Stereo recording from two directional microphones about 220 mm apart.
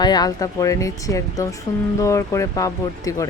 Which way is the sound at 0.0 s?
20° left (ahead or behind).